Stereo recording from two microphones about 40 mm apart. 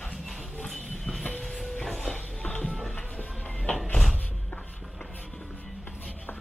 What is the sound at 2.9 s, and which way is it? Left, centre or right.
Music, left.